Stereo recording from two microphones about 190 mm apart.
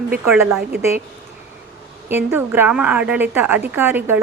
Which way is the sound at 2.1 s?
10° right (ahead or behind).